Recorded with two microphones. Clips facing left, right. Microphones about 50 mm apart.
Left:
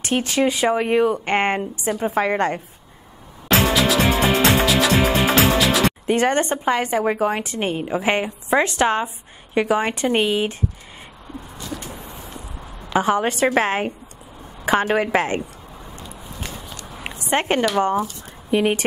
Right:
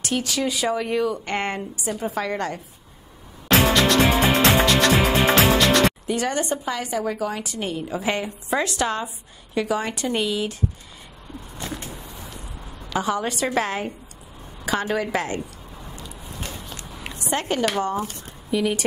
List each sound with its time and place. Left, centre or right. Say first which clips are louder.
0.0 s a woman's voice: left 5 dB; left
3.4 s music: even; centre
6.0 s a woman's voice: left 5 dB; left
11.9 s a sound: left 2 dB; left
12.9 s a woman's voice: left 5 dB; left
16.9 s a sound: left 5 dB; left
17.7 s a woman's voice: left 5 dB; left